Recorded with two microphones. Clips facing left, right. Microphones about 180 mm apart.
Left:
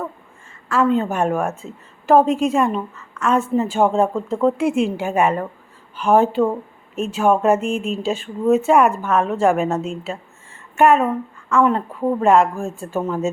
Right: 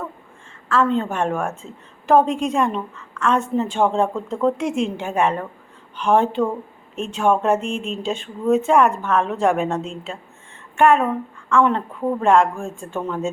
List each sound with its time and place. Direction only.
0.7 s a woman's voice: 5° left (ahead or behind)